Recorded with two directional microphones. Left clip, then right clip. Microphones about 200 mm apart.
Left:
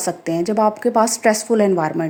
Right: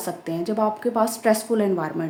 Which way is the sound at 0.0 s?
30° left (ahead or behind).